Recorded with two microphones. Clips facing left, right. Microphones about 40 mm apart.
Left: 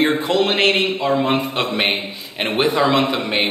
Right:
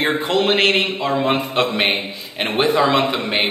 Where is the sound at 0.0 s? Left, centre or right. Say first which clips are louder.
Left 1 dB; centre.